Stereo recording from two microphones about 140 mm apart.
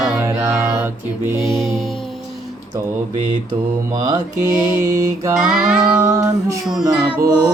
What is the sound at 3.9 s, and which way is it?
Mantra, 25° right (ahead or behind).